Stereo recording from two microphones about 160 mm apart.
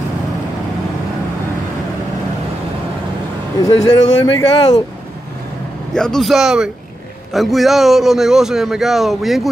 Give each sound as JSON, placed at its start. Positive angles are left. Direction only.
{"t": 3.6, "sound": "speech", "side_deg": 25}
{"t": 5.9, "sound": "a man's voice", "side_deg": 5}